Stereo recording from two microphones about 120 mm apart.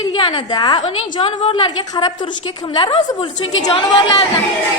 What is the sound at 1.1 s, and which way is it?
A woman's voice, 50° left (ahead or behind).